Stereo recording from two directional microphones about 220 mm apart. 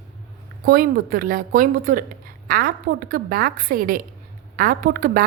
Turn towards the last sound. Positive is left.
turn(degrees=-40)  # may be behind; listen again after turning